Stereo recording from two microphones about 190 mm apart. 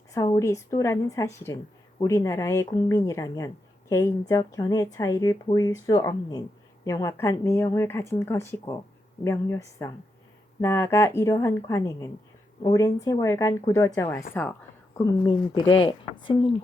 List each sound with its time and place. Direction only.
0.1 s speech: 15° left (ahead or behind)